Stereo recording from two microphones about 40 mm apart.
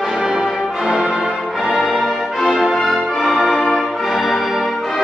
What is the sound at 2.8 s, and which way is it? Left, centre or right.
Music, centre.